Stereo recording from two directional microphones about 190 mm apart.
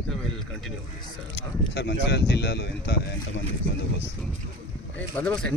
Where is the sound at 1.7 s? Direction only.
60° left (ahead or behind).